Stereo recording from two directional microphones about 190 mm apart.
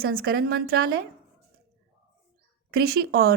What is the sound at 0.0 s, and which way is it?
A woman's voice, 55° right (ahead or behind).